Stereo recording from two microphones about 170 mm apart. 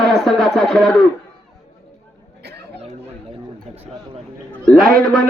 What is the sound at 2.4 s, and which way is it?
Chatter, 70° right (ahead or behind).